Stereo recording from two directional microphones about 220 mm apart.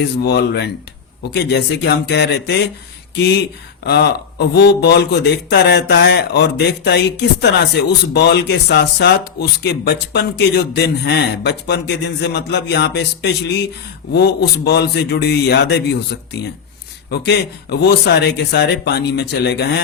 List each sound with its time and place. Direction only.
0.0 s speech: 50° left (ahead or behind)
17.1 s speech: 50° left (ahead or behind)